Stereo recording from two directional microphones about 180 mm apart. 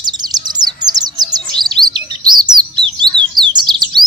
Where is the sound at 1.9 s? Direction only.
25° right (ahead or behind).